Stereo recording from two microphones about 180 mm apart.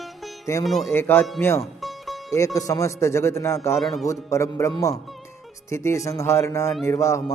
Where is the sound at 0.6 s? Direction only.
Centre (ahead or behind).